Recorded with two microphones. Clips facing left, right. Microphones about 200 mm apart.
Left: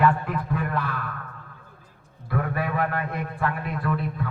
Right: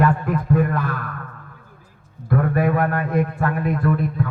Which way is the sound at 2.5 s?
45° right (ahead or behind).